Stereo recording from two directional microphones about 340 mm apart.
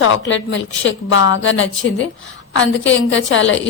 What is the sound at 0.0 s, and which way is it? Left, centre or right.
A woman's voice, left.